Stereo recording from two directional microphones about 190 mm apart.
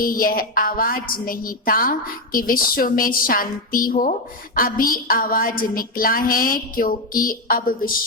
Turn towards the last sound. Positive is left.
turn(degrees=50)  # may be behind; listen again after turning